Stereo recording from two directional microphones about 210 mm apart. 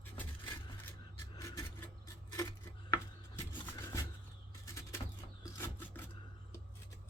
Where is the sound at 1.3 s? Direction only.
15° left (ahead or behind).